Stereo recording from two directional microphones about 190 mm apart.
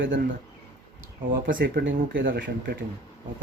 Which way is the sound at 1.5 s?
50° right (ahead or behind).